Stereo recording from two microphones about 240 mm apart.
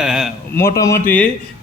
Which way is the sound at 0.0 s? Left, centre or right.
Centre.